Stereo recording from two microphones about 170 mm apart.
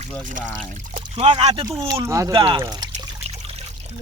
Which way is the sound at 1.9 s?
20° right (ahead or behind).